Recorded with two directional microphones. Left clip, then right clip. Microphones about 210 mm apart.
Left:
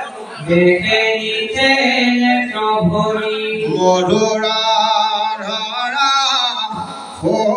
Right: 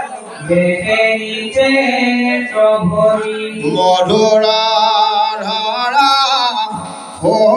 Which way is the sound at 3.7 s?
35° right (ahead or behind).